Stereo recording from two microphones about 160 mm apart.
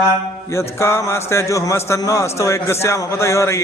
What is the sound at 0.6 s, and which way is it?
A man's voice, 15° left (ahead or behind).